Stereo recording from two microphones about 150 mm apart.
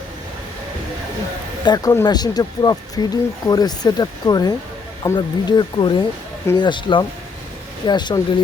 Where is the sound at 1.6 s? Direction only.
25° left (ahead or behind).